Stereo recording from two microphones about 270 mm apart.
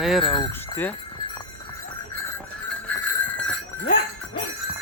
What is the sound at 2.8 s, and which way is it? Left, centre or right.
Jingle bell, centre.